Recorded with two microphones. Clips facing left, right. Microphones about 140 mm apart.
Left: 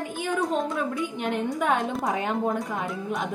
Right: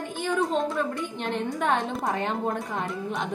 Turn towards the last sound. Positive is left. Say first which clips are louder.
# left 1 dB
turn(degrees=0)  # may be behind; listen again after turning